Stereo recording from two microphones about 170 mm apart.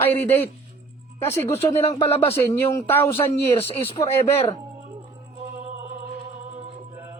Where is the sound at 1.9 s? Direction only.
35° left (ahead or behind).